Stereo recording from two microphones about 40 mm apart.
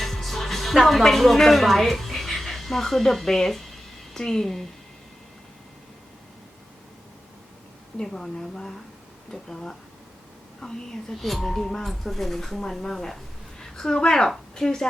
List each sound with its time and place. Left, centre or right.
0.0 s speech: centre
7.9 s a woman's voice: centre